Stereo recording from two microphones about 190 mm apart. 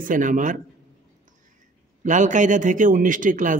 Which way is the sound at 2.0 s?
40° right (ahead or behind).